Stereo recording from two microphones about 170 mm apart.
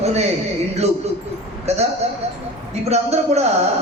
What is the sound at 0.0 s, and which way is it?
Speech, 40° right (ahead or behind).